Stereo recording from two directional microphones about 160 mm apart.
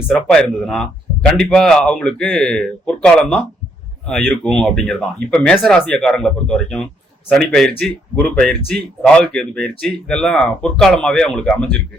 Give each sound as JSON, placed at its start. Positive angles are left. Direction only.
{"t": 0.1, "sound": "a man's voice", "side_deg": 5}